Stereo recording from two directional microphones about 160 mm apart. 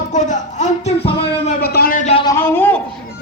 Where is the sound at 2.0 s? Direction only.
40° left (ahead or behind).